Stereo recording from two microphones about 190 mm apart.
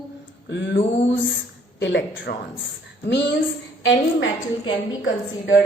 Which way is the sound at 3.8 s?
75° left (ahead or behind).